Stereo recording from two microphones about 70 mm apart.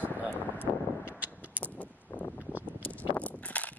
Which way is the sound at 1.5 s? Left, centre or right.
Left.